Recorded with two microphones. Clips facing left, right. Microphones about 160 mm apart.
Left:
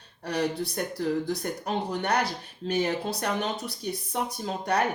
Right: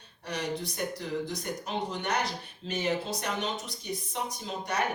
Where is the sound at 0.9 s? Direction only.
60° left (ahead or behind).